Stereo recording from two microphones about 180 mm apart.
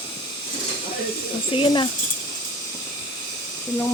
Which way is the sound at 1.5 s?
25° left (ahead or behind).